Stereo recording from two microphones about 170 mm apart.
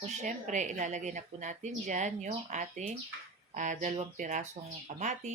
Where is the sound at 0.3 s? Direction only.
45° right (ahead or behind).